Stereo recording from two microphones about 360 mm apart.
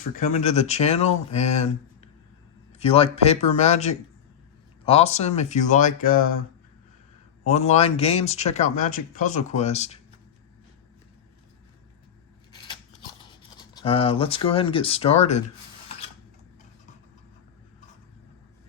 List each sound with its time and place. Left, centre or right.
0.2 s speech: centre
2.7 s speech: centre
7.5 s speech: centre
13.1 s speech: centre